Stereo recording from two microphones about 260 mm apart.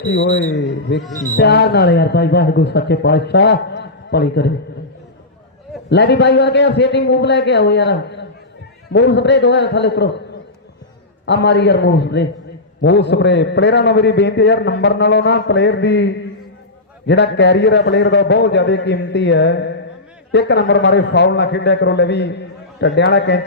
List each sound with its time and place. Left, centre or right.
0.0 s a man's voice: left
5.9 s a man's voice: left
11.3 s a man's voice: left